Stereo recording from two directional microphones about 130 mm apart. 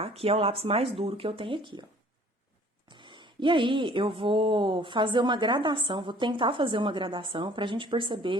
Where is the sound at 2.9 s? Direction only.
35° right (ahead or behind).